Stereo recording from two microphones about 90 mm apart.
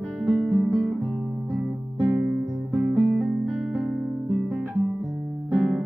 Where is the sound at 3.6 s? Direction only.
10° right (ahead or behind).